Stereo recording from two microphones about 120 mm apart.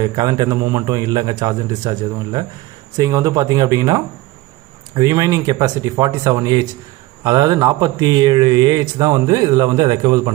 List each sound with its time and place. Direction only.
0.0 s speech: 30° right (ahead or behind)